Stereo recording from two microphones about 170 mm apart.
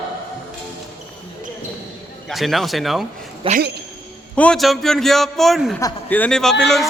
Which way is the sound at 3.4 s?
30° right (ahead or behind).